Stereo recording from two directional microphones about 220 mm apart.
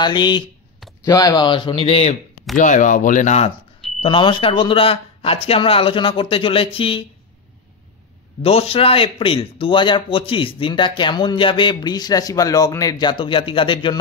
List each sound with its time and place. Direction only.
0.0 s a man's voice: 20° left (ahead or behind)
8.4 s a man's voice: 25° left (ahead or behind)